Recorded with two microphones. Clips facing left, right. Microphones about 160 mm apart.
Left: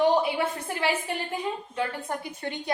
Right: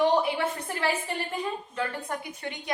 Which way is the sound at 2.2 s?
30° left (ahead or behind).